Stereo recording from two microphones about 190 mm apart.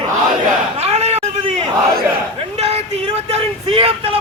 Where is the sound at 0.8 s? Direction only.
35° right (ahead or behind).